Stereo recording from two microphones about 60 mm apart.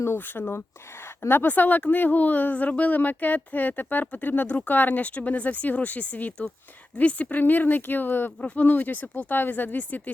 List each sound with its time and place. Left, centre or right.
0.2 s a woman's voice: left